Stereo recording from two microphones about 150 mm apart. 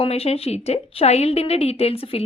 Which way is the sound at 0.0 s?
40° left (ahead or behind).